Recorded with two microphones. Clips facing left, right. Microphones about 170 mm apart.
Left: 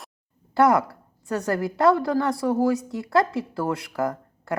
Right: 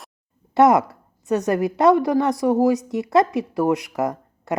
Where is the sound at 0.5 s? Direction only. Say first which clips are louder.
Right 4 dB; 20° right (ahead or behind).